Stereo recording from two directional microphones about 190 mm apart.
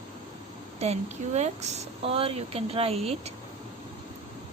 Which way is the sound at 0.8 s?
35° right (ahead or behind).